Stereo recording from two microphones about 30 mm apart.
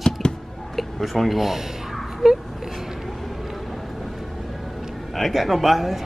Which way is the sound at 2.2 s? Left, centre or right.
Centre.